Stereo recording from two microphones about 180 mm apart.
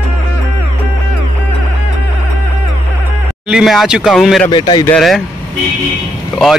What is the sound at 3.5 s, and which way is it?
Speech, centre (ahead or behind).